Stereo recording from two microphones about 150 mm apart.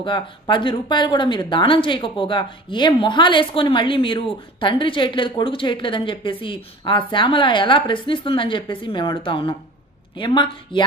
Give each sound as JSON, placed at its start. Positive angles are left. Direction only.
{"t": 0.0, "sound": "speech", "side_deg": 30}